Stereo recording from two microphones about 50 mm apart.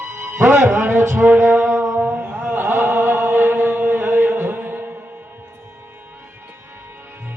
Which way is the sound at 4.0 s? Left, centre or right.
Right.